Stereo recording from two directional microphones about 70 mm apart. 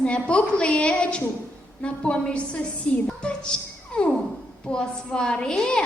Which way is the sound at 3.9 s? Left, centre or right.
Centre.